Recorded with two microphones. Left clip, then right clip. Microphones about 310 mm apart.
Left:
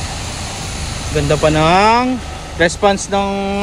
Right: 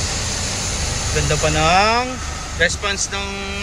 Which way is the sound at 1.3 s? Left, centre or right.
Centre.